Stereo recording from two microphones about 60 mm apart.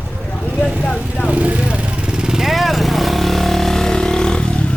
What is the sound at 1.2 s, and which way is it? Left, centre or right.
Vehicle, right.